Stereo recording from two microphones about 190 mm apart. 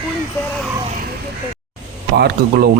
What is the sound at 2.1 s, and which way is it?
Speech, 60° right (ahead or behind).